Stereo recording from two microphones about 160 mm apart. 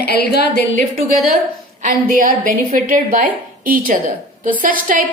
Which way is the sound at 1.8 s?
55° right (ahead or behind).